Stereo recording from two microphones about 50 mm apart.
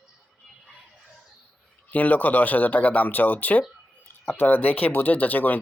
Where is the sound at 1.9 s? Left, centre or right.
Left.